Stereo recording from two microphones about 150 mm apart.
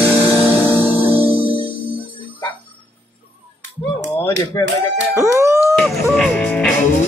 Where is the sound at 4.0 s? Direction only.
20° left (ahead or behind).